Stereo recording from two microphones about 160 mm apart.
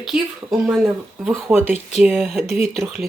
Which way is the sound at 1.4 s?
15° right (ahead or behind).